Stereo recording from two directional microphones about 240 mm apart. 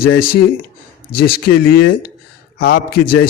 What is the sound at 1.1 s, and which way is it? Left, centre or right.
Speech, left.